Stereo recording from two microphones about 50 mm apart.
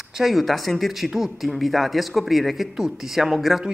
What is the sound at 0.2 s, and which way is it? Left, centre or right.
Speech, centre.